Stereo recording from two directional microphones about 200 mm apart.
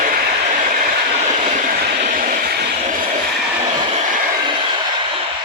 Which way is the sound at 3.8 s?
25° right (ahead or behind).